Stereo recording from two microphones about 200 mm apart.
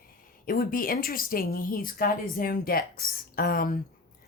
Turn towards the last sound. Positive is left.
turn(degrees=45)  # may be behind; listen again after turning